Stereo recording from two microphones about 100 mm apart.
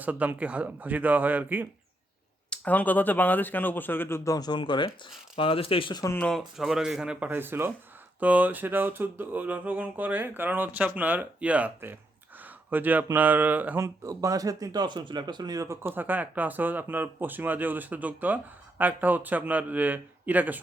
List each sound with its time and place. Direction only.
0.0 s speech: 15° right (ahead or behind)
2.5 s speech: 15° left (ahead or behind); by 4.9 s 50° left (ahead or behind)
5.4 s speech: 65° left (ahead or behind)
5.9 s speech: 35° left (ahead or behind)
6.1 s speech: 10° left (ahead or behind)
6.6 s a man's voice: 5° right (ahead or behind)
7.3 s speech: 20° right (ahead or behind)
13.8 s speech: 35° right (ahead or behind)
15.9 s speech: 20° right (ahead or behind)